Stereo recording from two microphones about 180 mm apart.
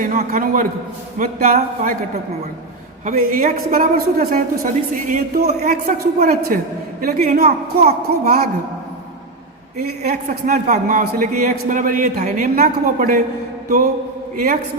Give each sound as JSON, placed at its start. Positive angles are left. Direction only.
{"t": 0.0, "sound": "a woman's voice", "side_deg": -50}
{"t": 3.1, "sound": "a woman's voice", "side_deg": -45}
{"t": 10.1, "sound": "a woman's voice", "side_deg": -50}
{"t": 14.3, "sound": "a woman's voice", "side_deg": -55}